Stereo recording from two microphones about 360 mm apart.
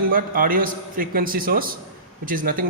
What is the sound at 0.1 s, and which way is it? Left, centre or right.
A man's voice, right.